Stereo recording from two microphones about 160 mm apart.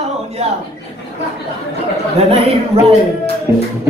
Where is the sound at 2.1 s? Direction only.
40° right (ahead or behind).